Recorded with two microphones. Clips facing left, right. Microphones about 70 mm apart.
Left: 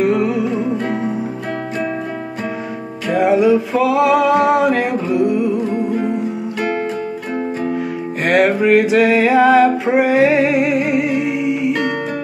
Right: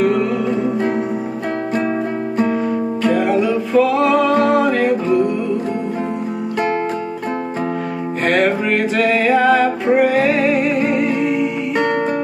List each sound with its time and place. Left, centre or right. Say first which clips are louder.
0.0 s music: left 1 dB; centre
3.0 s music: left 3 dB; centre
8.3 s music: left 4 dB; centre